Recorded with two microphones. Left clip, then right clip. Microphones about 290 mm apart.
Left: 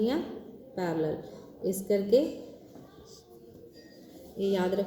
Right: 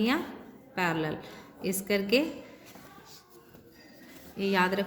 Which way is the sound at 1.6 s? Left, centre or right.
Right.